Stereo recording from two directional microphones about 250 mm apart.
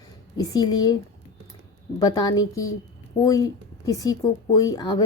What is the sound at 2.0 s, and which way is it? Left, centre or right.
A woman's voice, centre.